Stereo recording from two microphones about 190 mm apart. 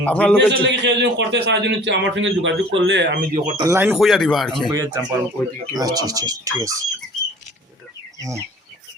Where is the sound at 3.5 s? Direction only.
15° right (ahead or behind).